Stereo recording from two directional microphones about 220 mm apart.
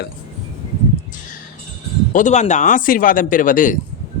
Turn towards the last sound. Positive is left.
turn(degrees=35)  # may be behind; listen again after turning